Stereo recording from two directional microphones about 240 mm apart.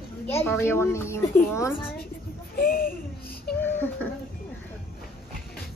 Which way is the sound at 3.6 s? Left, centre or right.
Centre.